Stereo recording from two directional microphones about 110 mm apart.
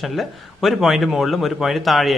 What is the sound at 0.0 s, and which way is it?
A man's voice, centre (ahead or behind).